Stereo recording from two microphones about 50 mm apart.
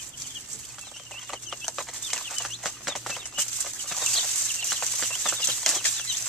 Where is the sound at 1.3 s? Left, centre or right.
Centre.